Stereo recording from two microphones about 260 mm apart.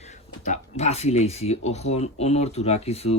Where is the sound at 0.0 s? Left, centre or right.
Left.